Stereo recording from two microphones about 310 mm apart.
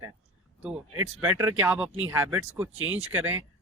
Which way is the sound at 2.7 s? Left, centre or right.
Right.